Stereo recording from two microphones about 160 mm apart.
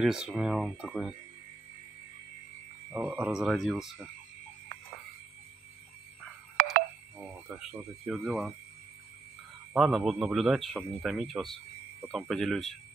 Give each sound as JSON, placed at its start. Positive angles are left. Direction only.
{"t": 0.0, "sound": "a man's voice", "side_deg": -5}
{"t": 2.9, "sound": "a man's voice", "side_deg": -10}
{"t": 6.5, "sound": "a sound", "side_deg": -60}
{"t": 7.2, "sound": "a sound", "side_deg": -5}
{"t": 8.1, "sound": "a man's voice", "side_deg": 0}
{"t": 9.8, "sound": "a man's voice", "side_deg": 0}